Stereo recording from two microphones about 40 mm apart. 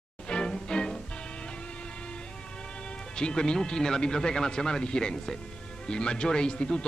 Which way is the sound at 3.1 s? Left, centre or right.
Left.